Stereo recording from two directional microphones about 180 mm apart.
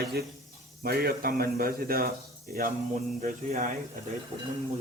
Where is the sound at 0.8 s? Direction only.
55° right (ahead or behind).